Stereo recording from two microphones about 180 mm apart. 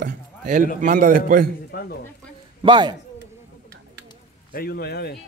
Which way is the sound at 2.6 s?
25° right (ahead or behind).